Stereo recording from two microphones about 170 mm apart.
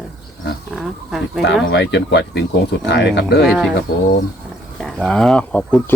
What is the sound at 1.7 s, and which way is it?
Speech, 85° left.